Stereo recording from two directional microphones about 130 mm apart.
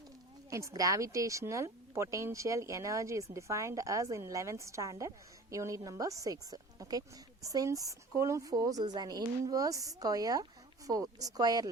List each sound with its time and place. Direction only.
0.5 s a woman's voice: 25° right (ahead or behind)